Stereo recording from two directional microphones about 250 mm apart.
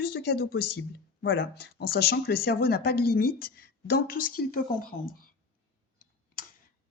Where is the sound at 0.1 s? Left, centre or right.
Left.